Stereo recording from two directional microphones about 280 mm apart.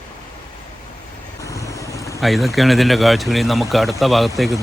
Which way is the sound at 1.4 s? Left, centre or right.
Centre.